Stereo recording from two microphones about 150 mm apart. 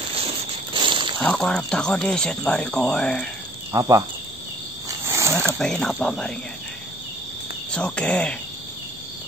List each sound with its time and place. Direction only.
0.2 s a sound: 35° right (ahead or behind)
1.2 s speech: 5° left (ahead or behind)
3.7 s cricket: 20° right (ahead or behind)
5.6 s speech: 5° left (ahead or behind)
7.7 s speech: 5° left (ahead or behind)